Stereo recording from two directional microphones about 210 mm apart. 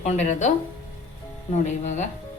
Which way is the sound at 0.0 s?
35° left (ahead or behind).